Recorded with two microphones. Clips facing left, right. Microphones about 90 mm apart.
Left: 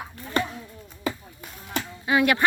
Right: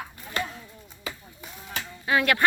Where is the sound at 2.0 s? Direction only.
20° left (ahead or behind).